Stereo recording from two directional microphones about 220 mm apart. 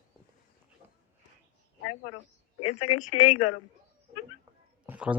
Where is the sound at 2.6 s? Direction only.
90° left.